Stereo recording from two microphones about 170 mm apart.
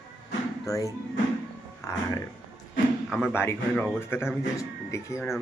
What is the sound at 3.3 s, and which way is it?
Speech, 15° left (ahead or behind).